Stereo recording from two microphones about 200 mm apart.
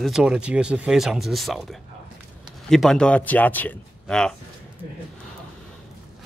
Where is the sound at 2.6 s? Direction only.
Centre (ahead or behind).